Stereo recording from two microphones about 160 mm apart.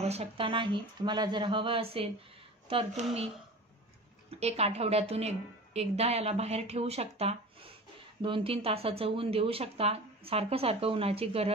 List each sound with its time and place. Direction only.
0.0 s speech: 40° right (ahead or behind)
4.3 s speech: 40° right (ahead or behind)